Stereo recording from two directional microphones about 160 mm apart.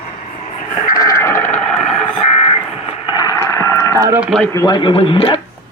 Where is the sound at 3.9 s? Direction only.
20° right (ahead or behind).